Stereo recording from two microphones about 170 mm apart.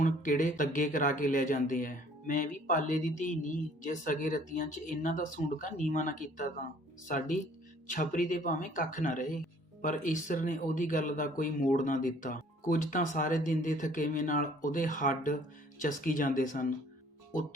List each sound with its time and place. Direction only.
0.0 s a man's voice: 50° left (ahead or behind)
7.9 s a man's voice: 50° left (ahead or behind)